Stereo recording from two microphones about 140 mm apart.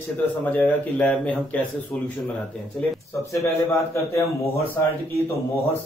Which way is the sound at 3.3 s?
20° left (ahead or behind).